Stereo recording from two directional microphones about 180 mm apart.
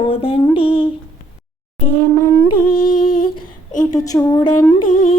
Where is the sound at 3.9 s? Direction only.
20° left (ahead or behind).